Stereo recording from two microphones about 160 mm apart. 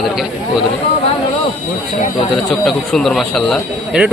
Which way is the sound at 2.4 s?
5° left (ahead or behind).